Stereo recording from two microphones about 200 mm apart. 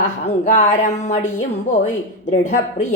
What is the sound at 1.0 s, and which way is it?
Speech, 35° left (ahead or behind).